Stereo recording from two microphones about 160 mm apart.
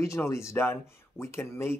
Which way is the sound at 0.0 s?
15° left (ahead or behind).